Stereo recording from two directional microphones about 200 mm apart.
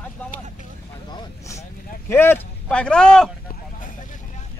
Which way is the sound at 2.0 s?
10° left (ahead or behind).